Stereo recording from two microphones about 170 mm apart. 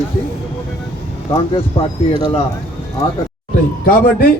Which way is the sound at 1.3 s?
30° left (ahead or behind).